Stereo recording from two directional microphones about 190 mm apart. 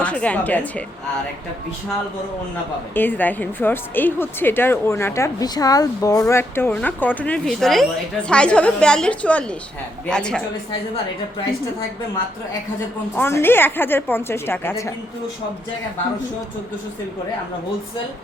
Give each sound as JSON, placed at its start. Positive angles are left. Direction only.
{"t": 0.0, "sound": "speech", "side_deg": 5}
{"t": 2.9, "sound": "speech", "side_deg": 10}
{"t": 10.7, "sound": "a woman's voice", "side_deg": 25}
{"t": 13.1, "sound": "speech", "side_deg": 10}